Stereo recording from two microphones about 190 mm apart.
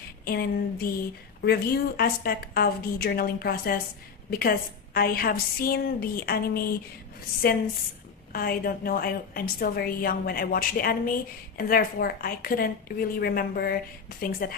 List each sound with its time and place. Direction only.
0.2 s a woman's voice: 55° left (ahead or behind)
8.3 s a woman's voice: 50° left (ahead or behind)